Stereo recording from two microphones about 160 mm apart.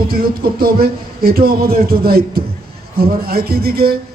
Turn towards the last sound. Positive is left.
turn(degrees=-70)  # may be behind; listen again after turning